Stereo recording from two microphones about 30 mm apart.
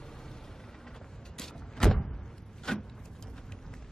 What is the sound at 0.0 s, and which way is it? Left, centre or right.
Vehicle, centre.